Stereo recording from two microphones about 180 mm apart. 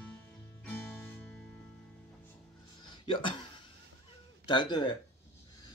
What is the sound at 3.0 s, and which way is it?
Music, 30° left (ahead or behind).